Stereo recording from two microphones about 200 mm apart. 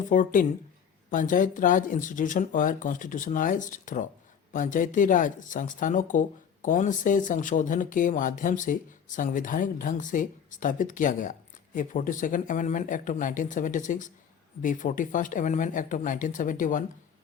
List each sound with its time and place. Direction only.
0.1 s speech: 40° left (ahead or behind)